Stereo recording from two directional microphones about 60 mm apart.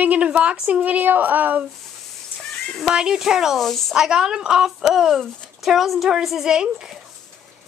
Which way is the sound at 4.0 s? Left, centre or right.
Centre.